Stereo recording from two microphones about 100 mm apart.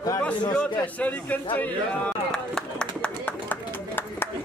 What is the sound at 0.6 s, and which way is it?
Speech, 15° left (ahead or behind).